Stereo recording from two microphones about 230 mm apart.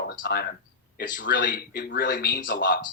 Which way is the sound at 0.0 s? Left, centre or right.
Left.